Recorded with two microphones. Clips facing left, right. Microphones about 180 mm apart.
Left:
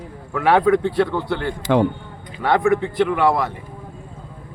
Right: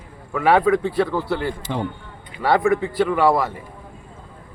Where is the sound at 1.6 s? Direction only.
75° left (ahead or behind).